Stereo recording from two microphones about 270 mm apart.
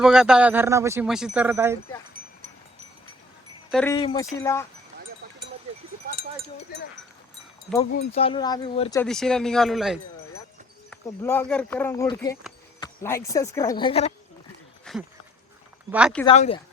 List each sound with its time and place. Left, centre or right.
0.0 s speech: centre
3.7 s speech: centre
3.9 s speech: centre
8.1 s speech: centre
9.0 s speech: centre
14.9 s a sound: centre
15.9 s speech: centre
16.2 s speech: left